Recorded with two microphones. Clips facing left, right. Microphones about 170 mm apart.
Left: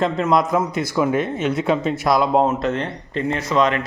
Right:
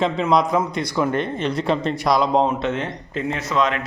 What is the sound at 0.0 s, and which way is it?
Speech, centre (ahead or behind).